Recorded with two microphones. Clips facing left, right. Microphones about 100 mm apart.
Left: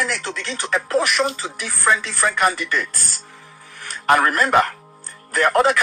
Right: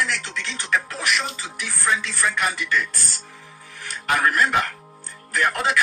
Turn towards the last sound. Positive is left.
turn(degrees=45)  # may be behind; listen again after turning